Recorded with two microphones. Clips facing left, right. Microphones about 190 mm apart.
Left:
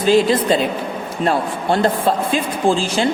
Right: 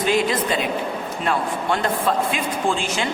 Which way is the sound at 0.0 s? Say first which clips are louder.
Left 6 dB; 30° left (ahead or behind).